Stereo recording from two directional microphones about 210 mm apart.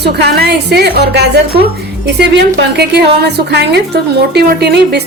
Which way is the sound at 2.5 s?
50° right (ahead or behind).